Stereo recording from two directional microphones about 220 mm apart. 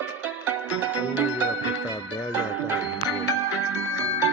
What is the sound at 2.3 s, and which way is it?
Music, 10° right (ahead or behind).